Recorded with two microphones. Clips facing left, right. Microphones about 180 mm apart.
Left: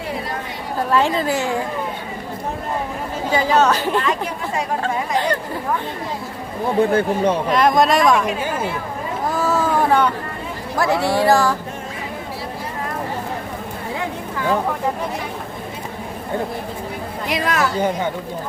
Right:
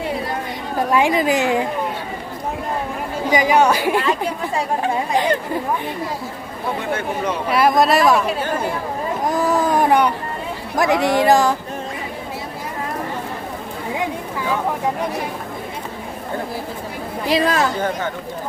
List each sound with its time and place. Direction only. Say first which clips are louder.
0.8 s a woman's voice: right 1 dB; 15° right (ahead or behind)
3.2 s a woman's voice: right 1 dB; 15° right (ahead or behind)
7.5 s speech: right 2 dB; 5° right (ahead or behind)
9.2 s a sound: right 1 dB; 15° right (ahead or behind)
10.8 s a woman's voice: right 2 dB; 15° right (ahead or behind)
17.2 s speech: right 3 dB; 30° right (ahead or behind)
17.7 s speech: left 2 dB; 15° left (ahead or behind)